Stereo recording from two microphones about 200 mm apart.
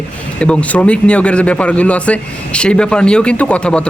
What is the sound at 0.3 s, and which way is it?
Speech, 5° left (ahead or behind).